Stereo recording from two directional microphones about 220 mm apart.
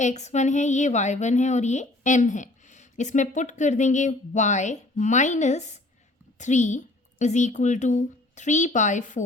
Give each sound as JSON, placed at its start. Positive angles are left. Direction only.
{"t": 0.0, "sound": "a woman's voice", "side_deg": 30}